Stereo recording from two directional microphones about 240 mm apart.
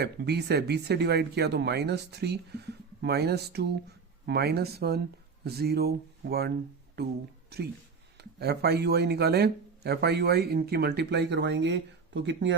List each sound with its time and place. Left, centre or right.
0.0 s speech: right
7.5 s speech: right